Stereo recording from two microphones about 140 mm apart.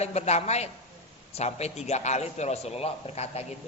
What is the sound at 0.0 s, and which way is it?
A man's voice, 50° left (ahead or behind).